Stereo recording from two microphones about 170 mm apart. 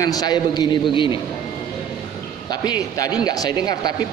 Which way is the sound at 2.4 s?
25° left (ahead or behind).